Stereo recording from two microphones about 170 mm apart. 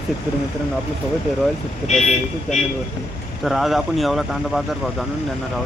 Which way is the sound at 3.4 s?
Centre (ahead or behind).